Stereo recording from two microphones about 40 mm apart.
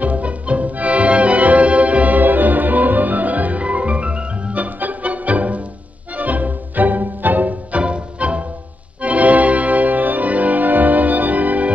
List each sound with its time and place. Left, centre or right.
0.0 s music: right
4.6 s music: right